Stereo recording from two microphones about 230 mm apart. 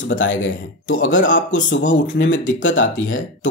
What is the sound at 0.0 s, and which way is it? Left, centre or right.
Speech, left.